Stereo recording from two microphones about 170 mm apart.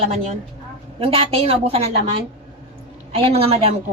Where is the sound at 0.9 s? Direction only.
35° right (ahead or behind).